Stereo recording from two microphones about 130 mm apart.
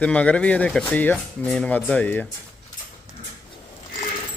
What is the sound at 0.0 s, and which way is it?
Speech, 10° left (ahead or behind).